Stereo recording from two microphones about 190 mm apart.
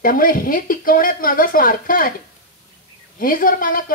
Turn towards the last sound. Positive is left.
turn(degrees=45)  # may be behind; listen again after turning